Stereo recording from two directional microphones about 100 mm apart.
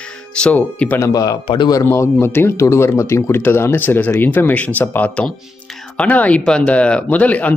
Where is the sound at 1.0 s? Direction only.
35° left (ahead or behind).